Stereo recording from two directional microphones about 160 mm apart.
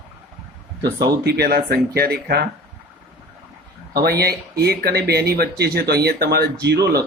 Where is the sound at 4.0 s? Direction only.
80° right.